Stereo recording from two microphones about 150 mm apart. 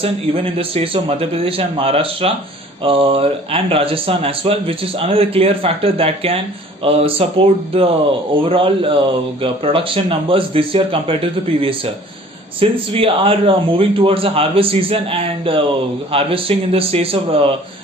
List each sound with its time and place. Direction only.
0.0 s speech: 40° right (ahead or behind)
12.5 s speech: 35° right (ahead or behind)